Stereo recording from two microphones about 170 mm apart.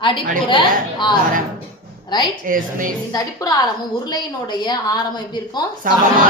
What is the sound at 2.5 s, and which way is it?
Speech, 55° right (ahead or behind).